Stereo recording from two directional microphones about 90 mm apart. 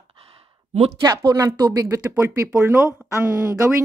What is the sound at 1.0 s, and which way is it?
Speech, 55° right (ahead or behind).